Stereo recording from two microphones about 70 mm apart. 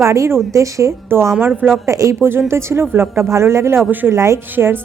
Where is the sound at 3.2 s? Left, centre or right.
Right.